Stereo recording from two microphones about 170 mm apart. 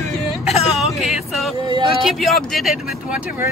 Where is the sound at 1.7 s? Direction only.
30° right (ahead or behind).